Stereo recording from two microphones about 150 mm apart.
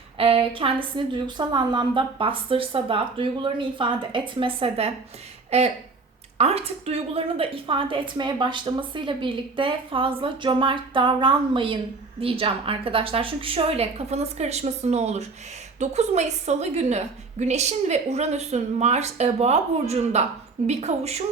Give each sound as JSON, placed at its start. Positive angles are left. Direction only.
{"t": 0.2, "sound": "a woman's voice", "side_deg": -40}